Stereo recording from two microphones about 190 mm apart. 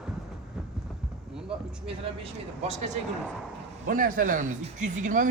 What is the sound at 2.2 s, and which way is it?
Speech, 35° right (ahead or behind).